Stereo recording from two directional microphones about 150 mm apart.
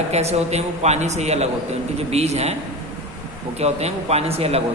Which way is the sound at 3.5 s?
45° right (ahead or behind).